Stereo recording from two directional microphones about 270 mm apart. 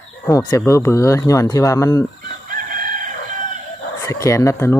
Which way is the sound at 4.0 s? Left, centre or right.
Centre.